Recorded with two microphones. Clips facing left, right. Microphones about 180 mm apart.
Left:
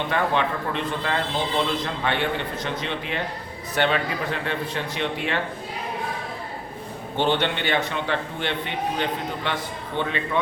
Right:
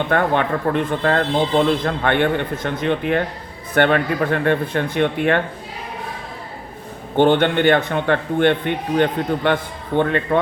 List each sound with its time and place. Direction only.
0.1 s a man's voice: 55° right (ahead or behind)
7.2 s a man's voice: 55° right (ahead or behind)